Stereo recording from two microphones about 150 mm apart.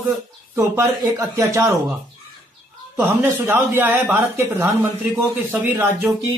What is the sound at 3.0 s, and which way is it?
A man's voice, 15° right (ahead or behind).